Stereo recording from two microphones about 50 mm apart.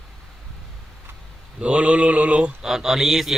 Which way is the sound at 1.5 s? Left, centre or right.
Right.